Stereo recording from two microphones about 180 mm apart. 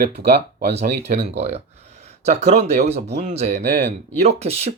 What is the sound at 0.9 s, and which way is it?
Speech, 35° right (ahead or behind).